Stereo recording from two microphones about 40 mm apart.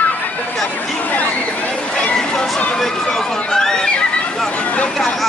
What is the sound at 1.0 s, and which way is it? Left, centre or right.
Speech, left.